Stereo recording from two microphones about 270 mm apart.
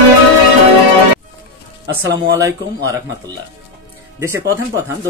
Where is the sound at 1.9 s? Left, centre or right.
Centre.